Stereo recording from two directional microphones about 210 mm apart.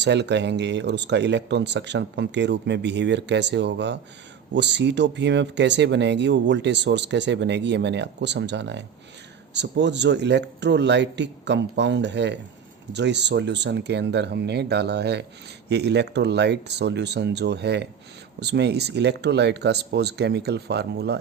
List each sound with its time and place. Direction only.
0.0 s speech: 55° right (ahead or behind)